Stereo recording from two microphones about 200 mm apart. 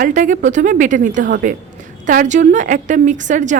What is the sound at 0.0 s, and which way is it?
A woman's voice, 40° right (ahead or behind).